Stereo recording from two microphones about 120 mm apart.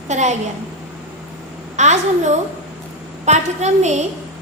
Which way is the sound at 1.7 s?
75° right (ahead or behind).